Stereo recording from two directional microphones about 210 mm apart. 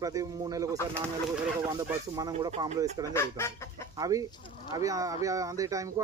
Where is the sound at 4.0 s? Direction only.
15° right (ahead or behind).